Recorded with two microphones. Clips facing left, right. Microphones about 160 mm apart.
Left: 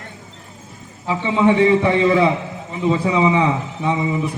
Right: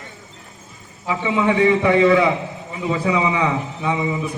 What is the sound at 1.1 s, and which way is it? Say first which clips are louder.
A man's voice: left 3 dB; 30° left (ahead or behind).